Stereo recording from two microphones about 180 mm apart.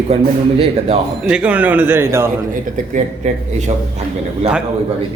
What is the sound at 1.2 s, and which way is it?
Speech, 5° right (ahead or behind).